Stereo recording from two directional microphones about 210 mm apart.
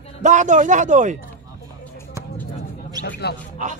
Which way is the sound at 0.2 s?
35° right (ahead or behind).